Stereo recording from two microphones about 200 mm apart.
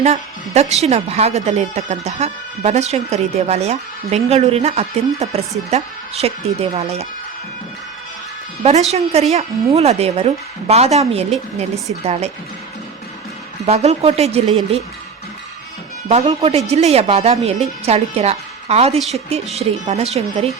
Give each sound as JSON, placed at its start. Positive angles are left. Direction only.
{"t": 0.0, "sound": "speech", "side_deg": -35}
{"t": 8.6, "sound": "speech", "side_deg": -30}
{"t": 13.7, "sound": "speech", "side_deg": -30}
{"t": 16.0, "sound": "speech", "side_deg": -30}
{"t": 18.9, "sound": "a woman's voice", "side_deg": 0}
{"t": 19.5, "sound": "speech", "side_deg": -35}